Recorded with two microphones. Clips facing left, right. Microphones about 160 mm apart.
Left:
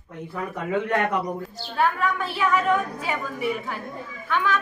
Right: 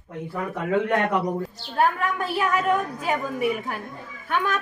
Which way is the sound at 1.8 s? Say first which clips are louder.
Right 1 dB; 45° right (ahead or behind).